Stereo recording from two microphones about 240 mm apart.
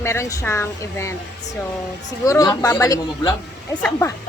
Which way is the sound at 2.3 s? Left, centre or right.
Centre.